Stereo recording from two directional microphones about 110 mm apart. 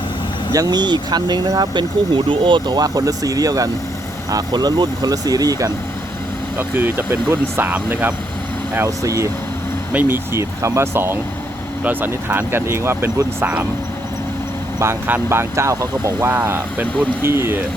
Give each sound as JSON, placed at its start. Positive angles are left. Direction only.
{"t": 0.5, "sound": "speech", "side_deg": -35}
{"t": 6.6, "sound": "speech", "side_deg": -20}
{"t": 9.9, "sound": "speech", "side_deg": -15}
{"t": 14.8, "sound": "speech", "side_deg": -20}
{"t": 16.3, "sound": "speech", "side_deg": -15}